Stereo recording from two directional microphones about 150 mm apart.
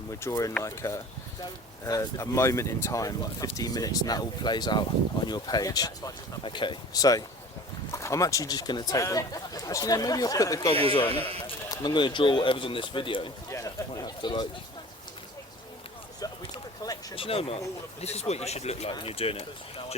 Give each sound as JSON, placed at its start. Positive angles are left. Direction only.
{"t": 0.1, "sound": "speech", "side_deg": 20}
{"t": 13.5, "sound": "speech", "side_deg": 20}
{"t": 16.2, "sound": "a sound", "side_deg": 25}
{"t": 17.2, "sound": "speech", "side_deg": 40}